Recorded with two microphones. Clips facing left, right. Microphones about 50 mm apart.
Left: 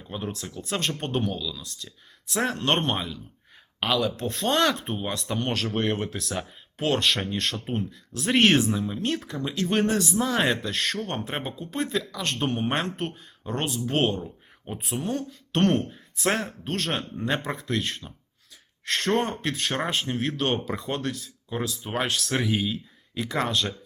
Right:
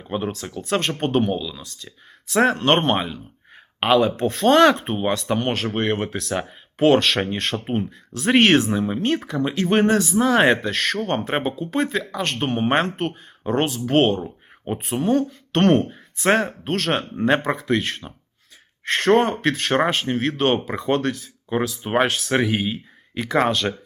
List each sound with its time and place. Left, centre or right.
0.0 s speech: right
6.1 s speech: centre
6.7 s speech: right
7.0 s speech: right
8.4 s speech: centre
8.7 s speech: right
9.9 s speech: centre
10.4 s speech: right
22.3 s speech: centre
22.5 s speech: right